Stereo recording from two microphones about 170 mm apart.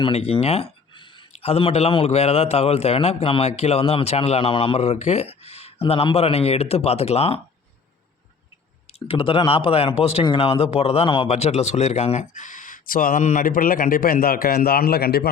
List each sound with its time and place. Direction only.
0.0 s a man's voice: 35° left (ahead or behind)
8.9 s a man's voice: 30° left (ahead or behind); by 15.3 s 65° left (ahead or behind)